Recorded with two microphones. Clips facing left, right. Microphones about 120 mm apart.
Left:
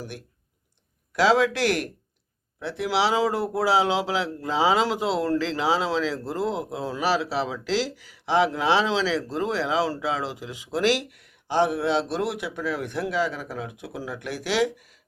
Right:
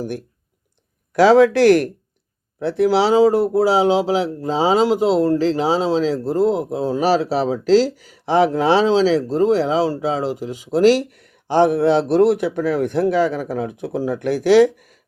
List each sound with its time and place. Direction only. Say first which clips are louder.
1.2 s a man's voice: right 9 dB; 45° right (ahead or behind)